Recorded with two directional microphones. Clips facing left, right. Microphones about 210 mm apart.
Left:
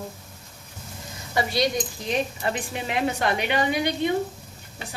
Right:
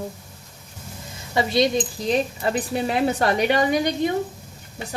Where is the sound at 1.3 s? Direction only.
25° right (ahead or behind).